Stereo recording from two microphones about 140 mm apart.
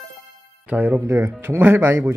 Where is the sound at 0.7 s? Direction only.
15° right (ahead or behind).